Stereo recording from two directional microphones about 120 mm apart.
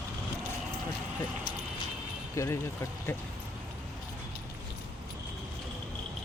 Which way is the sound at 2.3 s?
25° left (ahead or behind).